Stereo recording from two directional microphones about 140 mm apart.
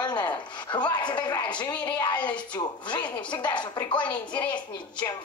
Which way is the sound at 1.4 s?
35° left (ahead or behind).